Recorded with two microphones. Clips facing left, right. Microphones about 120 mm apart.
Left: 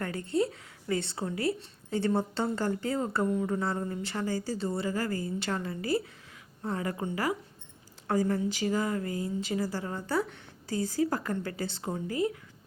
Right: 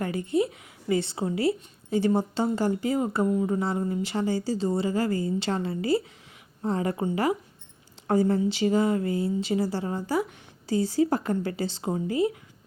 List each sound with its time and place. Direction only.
0.0 s a woman's voice: 15° right (ahead or behind)